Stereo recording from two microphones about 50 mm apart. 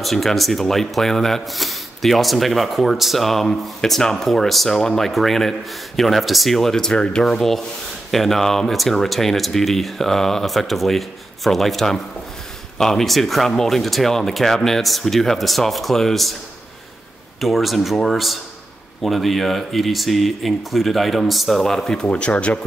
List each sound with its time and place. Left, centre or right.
0.0 s speech: centre
17.4 s speech: centre
22.1 s speech: left